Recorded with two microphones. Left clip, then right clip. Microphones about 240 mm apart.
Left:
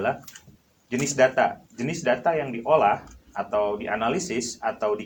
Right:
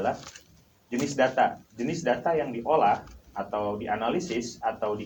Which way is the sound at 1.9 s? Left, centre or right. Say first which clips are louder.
Left 3 dB; left.